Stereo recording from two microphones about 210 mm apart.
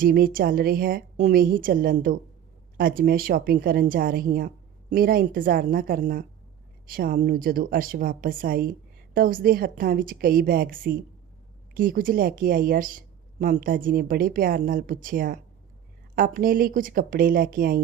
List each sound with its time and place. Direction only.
0.0 s speech: 45° right (ahead or behind)